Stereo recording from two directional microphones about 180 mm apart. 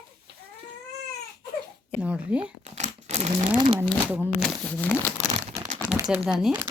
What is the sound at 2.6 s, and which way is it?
Crumpling, 40° right (ahead or behind).